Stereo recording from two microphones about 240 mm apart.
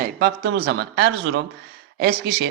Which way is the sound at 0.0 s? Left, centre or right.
Right.